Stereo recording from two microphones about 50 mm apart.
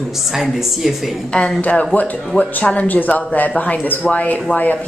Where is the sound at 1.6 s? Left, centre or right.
Left.